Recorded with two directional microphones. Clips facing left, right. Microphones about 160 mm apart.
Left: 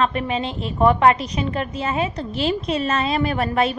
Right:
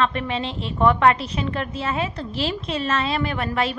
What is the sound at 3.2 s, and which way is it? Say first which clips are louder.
Speech: left 4 dB; 35° left (ahead or behind).